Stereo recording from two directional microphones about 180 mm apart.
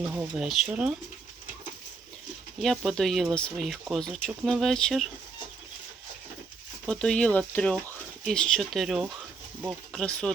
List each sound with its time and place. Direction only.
0.1 s speech: 5° right (ahead or behind)
2.6 s speech: centre (ahead or behind)
6.8 s speech: 5° left (ahead or behind)